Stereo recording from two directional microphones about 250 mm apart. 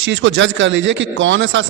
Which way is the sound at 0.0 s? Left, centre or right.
Right.